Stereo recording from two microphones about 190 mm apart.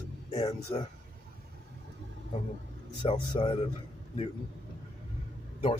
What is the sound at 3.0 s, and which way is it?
Speech, 30° left (ahead or behind).